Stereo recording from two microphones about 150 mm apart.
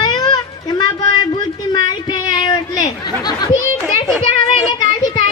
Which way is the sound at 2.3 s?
25° left (ahead or behind).